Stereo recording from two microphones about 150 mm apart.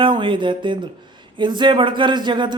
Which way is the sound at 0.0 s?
35° right (ahead or behind).